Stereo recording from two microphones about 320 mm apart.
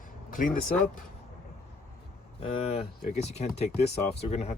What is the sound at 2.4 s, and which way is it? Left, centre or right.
Speech, centre.